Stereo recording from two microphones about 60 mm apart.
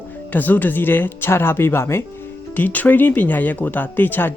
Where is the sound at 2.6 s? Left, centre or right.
Left.